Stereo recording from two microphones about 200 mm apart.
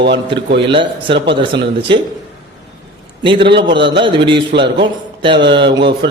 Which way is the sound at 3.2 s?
25° right (ahead or behind).